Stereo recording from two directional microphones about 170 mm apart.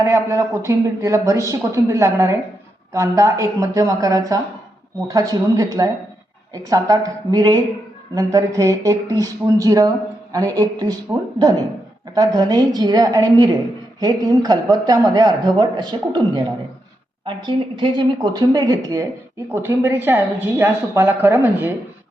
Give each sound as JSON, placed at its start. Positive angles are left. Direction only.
{"t": 0.0, "sound": "a man's voice", "side_deg": -15}